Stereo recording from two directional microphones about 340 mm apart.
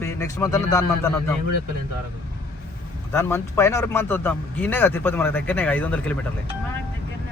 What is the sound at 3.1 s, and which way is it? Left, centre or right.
Speech, centre.